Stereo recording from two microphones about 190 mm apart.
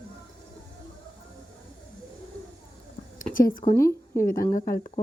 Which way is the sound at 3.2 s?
45° left (ahead or behind).